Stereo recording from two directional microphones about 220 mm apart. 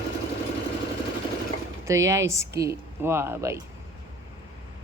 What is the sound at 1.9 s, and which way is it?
Speech, 15° right (ahead or behind).